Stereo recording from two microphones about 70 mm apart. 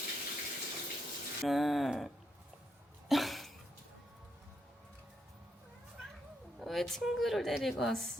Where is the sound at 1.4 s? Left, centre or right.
Centre.